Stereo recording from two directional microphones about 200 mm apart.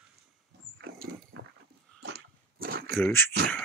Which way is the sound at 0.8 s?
55° right (ahead or behind).